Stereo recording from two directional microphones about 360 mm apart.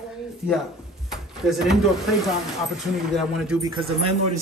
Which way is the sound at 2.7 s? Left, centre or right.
Centre.